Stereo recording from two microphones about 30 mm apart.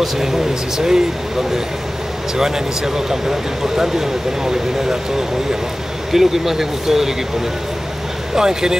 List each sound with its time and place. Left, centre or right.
0.0 s speech: centre
2.3 s speech: centre
6.1 s speech: centre
8.4 s speech: centre